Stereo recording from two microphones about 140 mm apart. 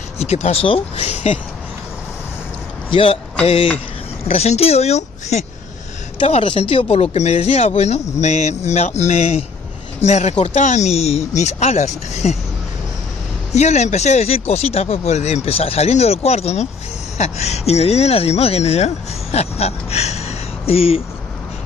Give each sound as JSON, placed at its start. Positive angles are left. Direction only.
{"t": 0.2, "sound": "speech", "side_deg": 45}
{"t": 2.9, "sound": "a man's voice", "side_deg": 40}
{"t": 4.3, "sound": "speech", "side_deg": 45}
{"t": 13.5, "sound": "speech", "side_deg": 55}